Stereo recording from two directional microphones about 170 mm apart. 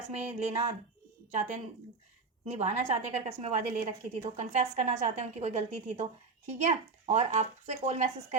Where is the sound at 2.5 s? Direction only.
40° right (ahead or behind).